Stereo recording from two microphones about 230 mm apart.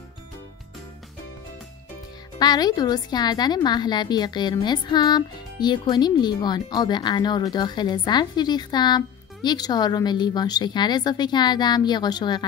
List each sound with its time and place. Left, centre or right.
2.3 s a woman's voice: centre